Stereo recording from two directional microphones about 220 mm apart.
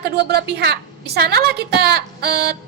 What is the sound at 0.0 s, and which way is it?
A woman's voice, 45° right (ahead or behind).